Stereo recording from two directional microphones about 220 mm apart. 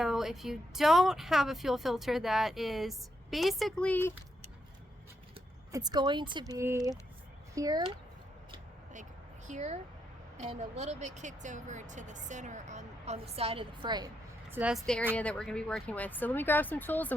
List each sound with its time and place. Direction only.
0.0 s speech: centre (ahead or behind)
5.7 s speech: 15° right (ahead or behind)
9.5 s speech: 30° right (ahead or behind)
14.5 s speech: 5° right (ahead or behind)